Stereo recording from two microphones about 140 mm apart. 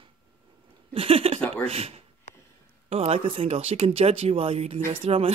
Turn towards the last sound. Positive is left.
turn(degrees=-40)  # may be behind; listen again after turning